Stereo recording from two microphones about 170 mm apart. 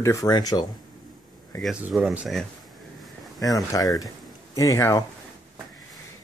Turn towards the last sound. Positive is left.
turn(degrees=20)  # may be behind; listen again after turning